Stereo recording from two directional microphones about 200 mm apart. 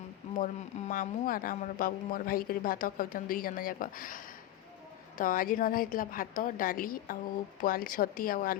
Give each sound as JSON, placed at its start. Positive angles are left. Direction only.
{"t": 0.3, "sound": "speech", "side_deg": 45}